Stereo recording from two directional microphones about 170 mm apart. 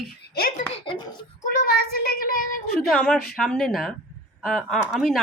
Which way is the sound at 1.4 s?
55° left (ahead or behind).